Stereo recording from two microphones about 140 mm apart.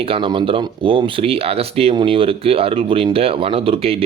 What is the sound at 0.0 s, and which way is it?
Speech, 40° right (ahead or behind).